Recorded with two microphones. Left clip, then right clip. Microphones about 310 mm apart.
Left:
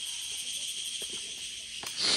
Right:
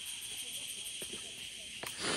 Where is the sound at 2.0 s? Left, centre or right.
Centre.